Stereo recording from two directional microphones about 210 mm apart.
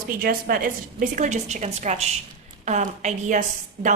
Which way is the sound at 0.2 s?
45° right (ahead or behind).